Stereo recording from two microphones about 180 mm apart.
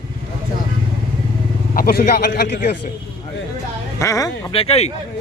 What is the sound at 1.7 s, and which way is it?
A man's voice, 55° left (ahead or behind).